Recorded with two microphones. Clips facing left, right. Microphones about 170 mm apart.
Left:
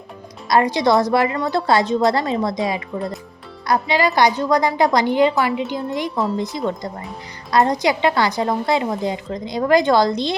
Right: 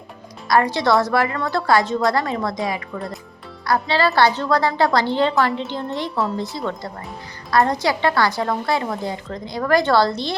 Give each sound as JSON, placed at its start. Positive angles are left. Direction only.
{"t": 0.4, "sound": "a woman's voice", "side_deg": 20}